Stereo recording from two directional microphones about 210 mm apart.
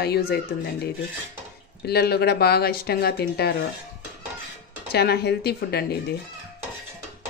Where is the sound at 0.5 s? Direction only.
50° left (ahead or behind).